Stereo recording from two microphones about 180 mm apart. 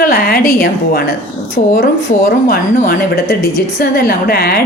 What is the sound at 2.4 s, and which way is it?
A woman's voice, 55° left (ahead or behind).